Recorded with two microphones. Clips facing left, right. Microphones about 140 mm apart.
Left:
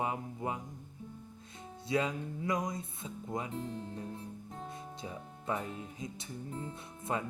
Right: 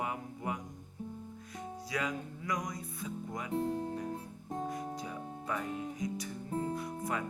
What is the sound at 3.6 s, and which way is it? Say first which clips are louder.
Speech: right 6 dB; 45° right (ahead or behind).